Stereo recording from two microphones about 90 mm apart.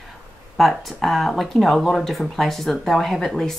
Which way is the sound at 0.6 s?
Centre (ahead or behind).